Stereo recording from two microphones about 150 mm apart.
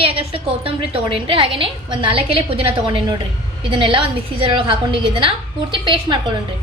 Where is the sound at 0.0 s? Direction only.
40° right (ahead or behind).